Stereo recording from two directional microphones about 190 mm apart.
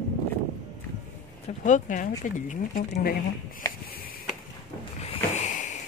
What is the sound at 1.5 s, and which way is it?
Speech, 40° left (ahead or behind).